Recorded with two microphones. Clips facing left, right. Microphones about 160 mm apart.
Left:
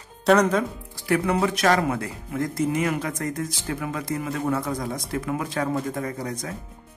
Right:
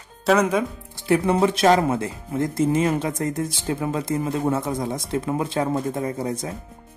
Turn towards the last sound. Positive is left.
turn(degrees=-25)  # may be behind; listen again after turning